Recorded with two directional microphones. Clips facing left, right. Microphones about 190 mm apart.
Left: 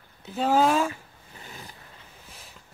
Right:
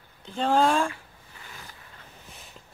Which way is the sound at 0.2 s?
5° left (ahead or behind).